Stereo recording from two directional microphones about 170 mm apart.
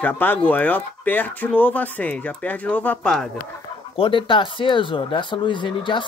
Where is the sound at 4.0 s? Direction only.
30° left (ahead or behind).